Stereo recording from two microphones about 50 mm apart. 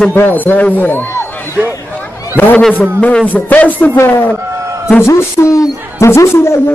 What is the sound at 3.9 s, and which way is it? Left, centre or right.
Speech, left.